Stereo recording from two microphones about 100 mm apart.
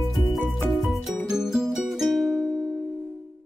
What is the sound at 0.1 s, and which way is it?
Music, centre (ahead or behind).